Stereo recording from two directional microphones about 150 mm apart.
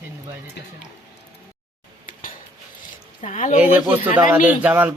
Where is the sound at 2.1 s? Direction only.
65° left (ahead or behind).